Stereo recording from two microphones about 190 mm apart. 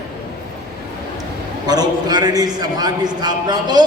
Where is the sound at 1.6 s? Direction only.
20° right (ahead or behind).